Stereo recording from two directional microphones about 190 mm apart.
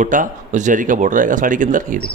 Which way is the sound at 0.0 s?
40° right (ahead or behind).